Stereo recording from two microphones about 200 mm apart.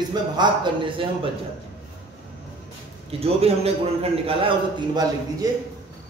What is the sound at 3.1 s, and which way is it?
A man's voice, 30° right (ahead or behind).